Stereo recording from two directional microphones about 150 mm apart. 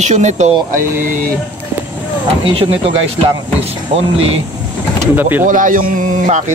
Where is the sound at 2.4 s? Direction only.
40° right (ahead or behind).